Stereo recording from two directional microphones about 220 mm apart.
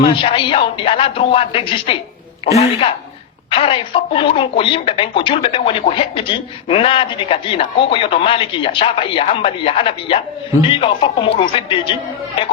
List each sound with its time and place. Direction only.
0.0 s speech: 25° left (ahead or behind)
3.5 s speech: 25° left (ahead or behind)